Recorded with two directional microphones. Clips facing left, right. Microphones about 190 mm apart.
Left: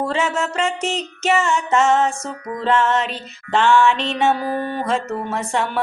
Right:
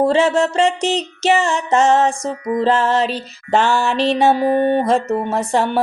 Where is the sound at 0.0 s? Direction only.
35° right (ahead or behind).